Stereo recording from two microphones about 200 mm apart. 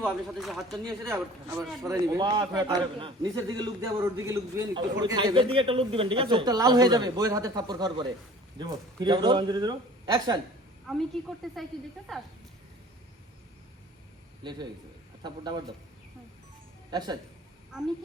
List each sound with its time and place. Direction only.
0.0 s speech: centre (ahead or behind)
0.9 s a man's voice: 15° right (ahead or behind)
10.8 s speech: centre (ahead or behind)
14.4 s a man's voice: 25° right (ahead or behind)
16.9 s a man's voice: 20° right (ahead or behind)